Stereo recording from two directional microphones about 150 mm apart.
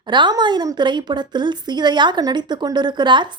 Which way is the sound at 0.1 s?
30° right (ahead or behind).